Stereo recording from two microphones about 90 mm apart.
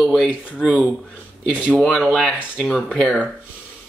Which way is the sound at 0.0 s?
10° left (ahead or behind).